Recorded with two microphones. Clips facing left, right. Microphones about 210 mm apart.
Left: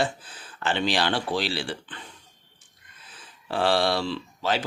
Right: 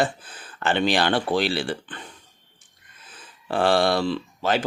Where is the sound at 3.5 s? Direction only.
50° right (ahead or behind).